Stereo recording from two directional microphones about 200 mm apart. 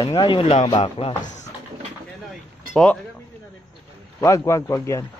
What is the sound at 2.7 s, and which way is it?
Speech, 5° left (ahead or behind).